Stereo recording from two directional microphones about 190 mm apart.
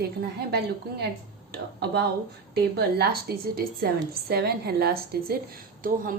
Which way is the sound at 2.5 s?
55° right (ahead or behind).